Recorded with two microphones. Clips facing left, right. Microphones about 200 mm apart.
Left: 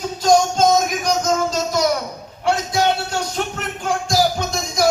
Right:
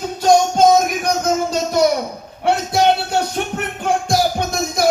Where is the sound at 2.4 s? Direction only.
60° right (ahead or behind).